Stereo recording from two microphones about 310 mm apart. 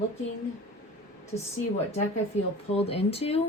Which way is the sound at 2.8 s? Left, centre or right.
Centre.